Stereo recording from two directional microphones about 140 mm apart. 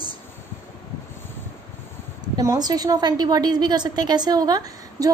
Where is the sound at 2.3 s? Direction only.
25° right (ahead or behind).